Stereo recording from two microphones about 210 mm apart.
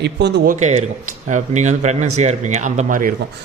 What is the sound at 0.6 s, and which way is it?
Speech, 35° right (ahead or behind).